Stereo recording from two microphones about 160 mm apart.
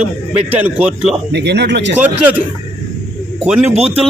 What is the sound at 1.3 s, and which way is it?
Speech, 90° right.